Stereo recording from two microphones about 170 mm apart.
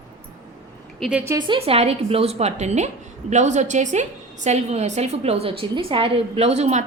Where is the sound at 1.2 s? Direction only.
25° right (ahead or behind).